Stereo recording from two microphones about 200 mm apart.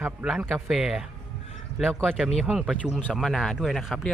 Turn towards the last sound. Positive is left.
turn(degrees=0)  # may be behind; listen again after turning